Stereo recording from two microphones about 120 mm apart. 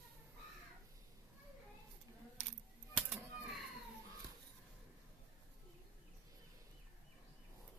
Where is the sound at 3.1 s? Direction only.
Centre (ahead or behind).